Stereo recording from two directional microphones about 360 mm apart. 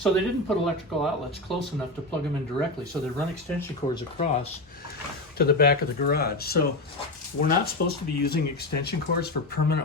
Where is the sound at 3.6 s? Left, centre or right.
Centre.